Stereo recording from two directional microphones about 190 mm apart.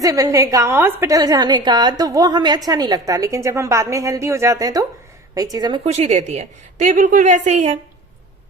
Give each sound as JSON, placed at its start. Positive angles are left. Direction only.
{"t": 0.0, "sound": "a woman's voice", "side_deg": -20}
{"t": 5.8, "sound": "a woman's voice", "side_deg": -35}